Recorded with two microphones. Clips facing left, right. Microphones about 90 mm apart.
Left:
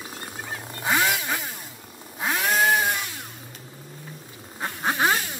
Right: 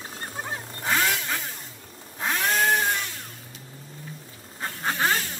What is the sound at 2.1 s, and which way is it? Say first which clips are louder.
Chainsaw: left 1 dB; 10° left (ahead or behind).